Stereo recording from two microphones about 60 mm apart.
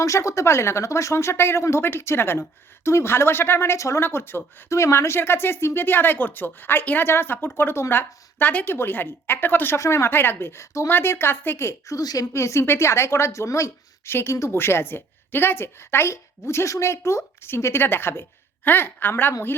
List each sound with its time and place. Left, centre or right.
0.0 s a woman's voice: left
3.8 s speech: left
4.0 s a woman's voice: left
9.7 s speech: left
10.1 s a woman's voice: left
11.9 s a woman's voice: left
12.3 s speech: left
14.1 s speech: left
14.6 s a woman's voice: left